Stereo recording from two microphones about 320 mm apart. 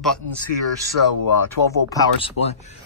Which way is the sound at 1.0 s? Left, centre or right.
Left.